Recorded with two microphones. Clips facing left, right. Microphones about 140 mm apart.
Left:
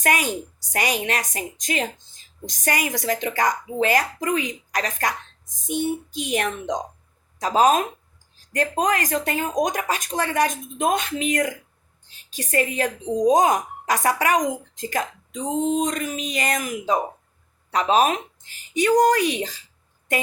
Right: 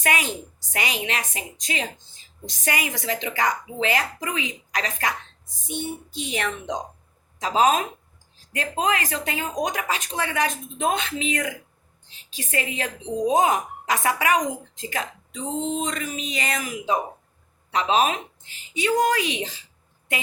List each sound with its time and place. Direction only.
0.0 s speech: 45° left (ahead or behind)